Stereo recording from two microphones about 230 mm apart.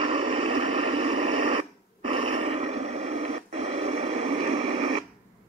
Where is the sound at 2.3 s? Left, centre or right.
Right.